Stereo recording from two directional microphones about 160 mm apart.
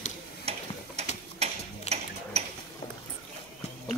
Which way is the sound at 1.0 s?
40° right (ahead or behind).